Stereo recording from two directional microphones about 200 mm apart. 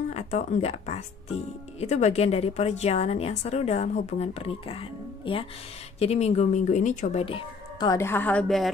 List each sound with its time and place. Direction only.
0.1 s a woman's voice: 35° left (ahead or behind); by 8.6 s 5° left (ahead or behind)